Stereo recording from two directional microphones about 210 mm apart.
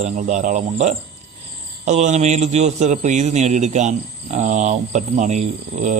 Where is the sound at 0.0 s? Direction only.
35° right (ahead or behind).